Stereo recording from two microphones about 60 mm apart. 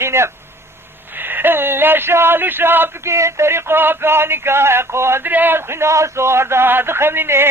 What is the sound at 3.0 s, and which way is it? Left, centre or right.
Male singing, right.